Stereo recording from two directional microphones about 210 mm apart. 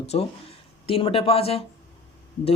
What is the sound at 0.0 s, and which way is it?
Speech, 30° left (ahead or behind).